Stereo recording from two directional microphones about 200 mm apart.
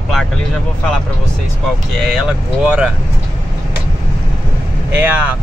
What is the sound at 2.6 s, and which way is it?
Speech, 5° right (ahead or behind).